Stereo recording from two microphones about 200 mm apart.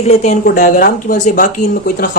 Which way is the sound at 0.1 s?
35° left (ahead or behind).